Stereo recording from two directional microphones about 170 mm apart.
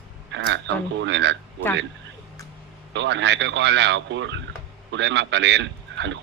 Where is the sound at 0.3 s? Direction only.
90° right.